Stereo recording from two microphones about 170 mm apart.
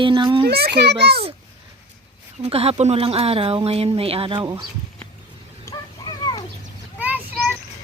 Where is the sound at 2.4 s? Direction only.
35° right (ahead or behind).